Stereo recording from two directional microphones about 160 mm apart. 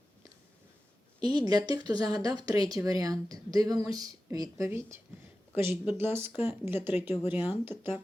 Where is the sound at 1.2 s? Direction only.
25° right (ahead or behind).